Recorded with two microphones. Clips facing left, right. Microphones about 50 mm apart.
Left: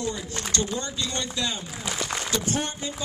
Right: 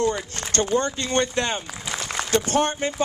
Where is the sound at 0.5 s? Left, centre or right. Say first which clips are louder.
Right 8 dB; right.